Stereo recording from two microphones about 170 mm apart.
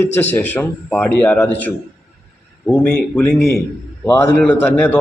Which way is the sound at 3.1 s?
5° left (ahead or behind).